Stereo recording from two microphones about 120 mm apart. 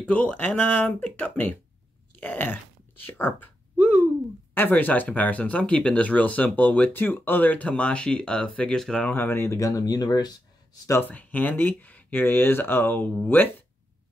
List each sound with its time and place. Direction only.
0.0 s speech: 10° left (ahead or behind)
2.1 s chewing: 15° left (ahead or behind)
3.2 s speech: 15° left (ahead or behind); by 10.3 s 35° left (ahead or behind)
10.9 s speech: 15° left (ahead or behind)